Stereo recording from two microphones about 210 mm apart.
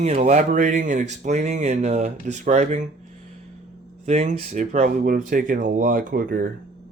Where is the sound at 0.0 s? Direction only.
30° right (ahead or behind).